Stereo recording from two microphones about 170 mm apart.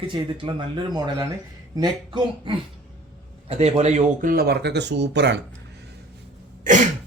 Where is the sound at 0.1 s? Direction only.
30° right (ahead or behind).